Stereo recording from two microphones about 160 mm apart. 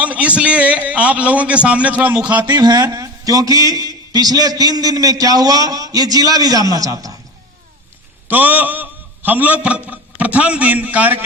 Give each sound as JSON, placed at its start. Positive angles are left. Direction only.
{"t": 0.0, "sound": "a man's voice", "side_deg": -10}
{"t": 2.5, "sound": "a man's voice", "side_deg": -25}
{"t": 8.3, "sound": "a man's voice", "side_deg": -10}